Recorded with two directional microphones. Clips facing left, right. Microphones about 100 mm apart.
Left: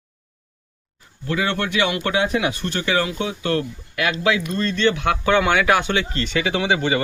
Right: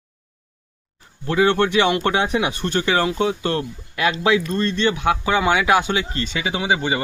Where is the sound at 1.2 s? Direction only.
30° right (ahead or behind).